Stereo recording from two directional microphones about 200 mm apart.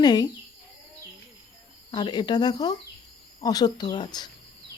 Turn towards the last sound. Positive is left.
turn(degrees=20)  # may be behind; listen again after turning